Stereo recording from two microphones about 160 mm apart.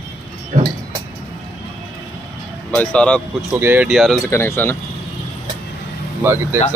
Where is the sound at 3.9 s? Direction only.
Centre (ahead or behind).